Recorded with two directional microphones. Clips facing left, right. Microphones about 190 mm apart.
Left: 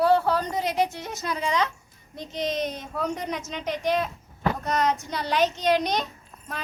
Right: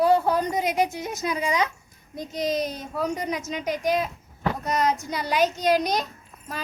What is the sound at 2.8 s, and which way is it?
A woman's voice, 5° right (ahead or behind).